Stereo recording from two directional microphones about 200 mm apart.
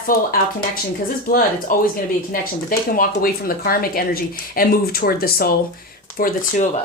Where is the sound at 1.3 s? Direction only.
45° left (ahead or behind).